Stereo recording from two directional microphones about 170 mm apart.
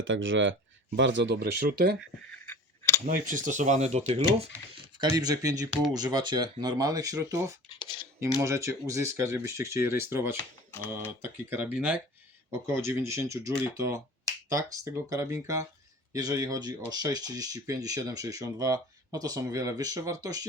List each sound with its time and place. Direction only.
0.1 s speech: 90° right; by 2.0 s 65° right (ahead or behind)
2.3 s scissors: 15° left (ahead or behind)
3.1 s speech: 50° right (ahead or behind)
4.9 s speech: 25° right (ahead or behind)
7.8 s speech: 30° left (ahead or behind)
8.4 s speech: 15° right (ahead or behind)